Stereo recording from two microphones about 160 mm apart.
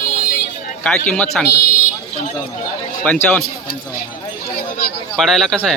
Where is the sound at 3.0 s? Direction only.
10° left (ahead or behind).